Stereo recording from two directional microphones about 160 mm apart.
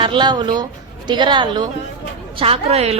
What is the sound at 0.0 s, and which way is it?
A woman's voice, 30° right (ahead or behind).